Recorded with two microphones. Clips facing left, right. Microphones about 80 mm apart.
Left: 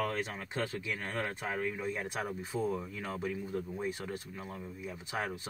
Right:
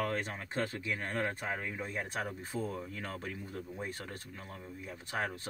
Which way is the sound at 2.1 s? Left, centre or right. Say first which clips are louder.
Left 1 dB; centre.